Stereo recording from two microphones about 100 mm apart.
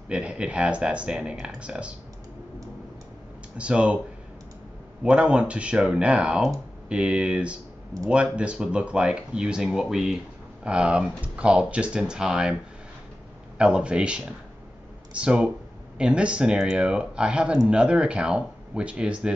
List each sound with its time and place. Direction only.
0.1 s speech: 10° right (ahead or behind)
3.5 s speech: 10° right (ahead or behind)
5.0 s speech: 10° right (ahead or behind)
13.6 s speech: 10° right (ahead or behind)